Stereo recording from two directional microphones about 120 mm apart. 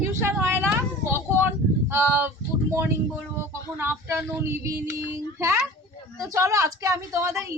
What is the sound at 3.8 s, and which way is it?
A woman's voice, 20° right (ahead or behind).